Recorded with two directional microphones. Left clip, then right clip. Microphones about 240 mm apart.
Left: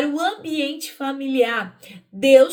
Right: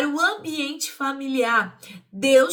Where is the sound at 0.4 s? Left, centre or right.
Centre.